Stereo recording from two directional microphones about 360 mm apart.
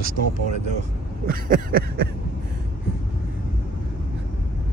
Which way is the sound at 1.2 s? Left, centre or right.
Right.